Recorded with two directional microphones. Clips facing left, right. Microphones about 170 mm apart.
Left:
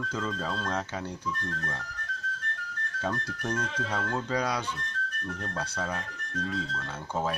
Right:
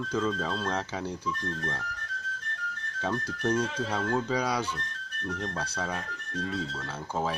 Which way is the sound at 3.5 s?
30° right (ahead or behind).